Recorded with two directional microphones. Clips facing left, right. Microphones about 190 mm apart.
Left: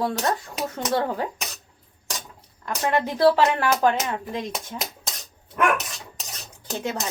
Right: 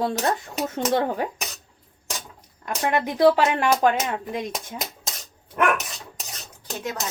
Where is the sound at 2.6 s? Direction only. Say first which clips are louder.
Even; 15° right (ahead or behind).